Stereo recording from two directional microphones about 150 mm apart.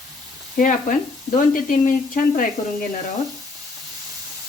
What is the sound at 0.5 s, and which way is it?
Speech, 60° left (ahead or behind).